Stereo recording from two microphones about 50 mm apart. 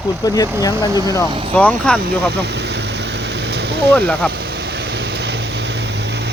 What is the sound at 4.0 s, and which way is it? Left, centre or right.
Speech, left.